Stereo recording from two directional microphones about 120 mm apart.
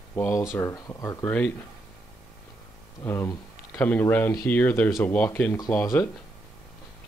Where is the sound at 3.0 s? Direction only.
20° left (ahead or behind).